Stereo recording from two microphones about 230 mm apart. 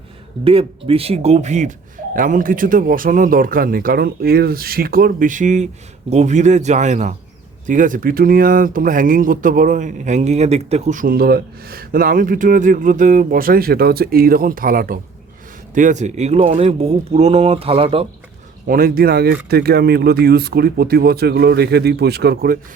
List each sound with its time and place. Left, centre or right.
0.4 s speech: right
18.7 s speech: right